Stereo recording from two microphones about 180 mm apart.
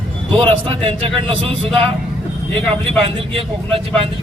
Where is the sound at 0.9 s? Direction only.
30° right (ahead or behind).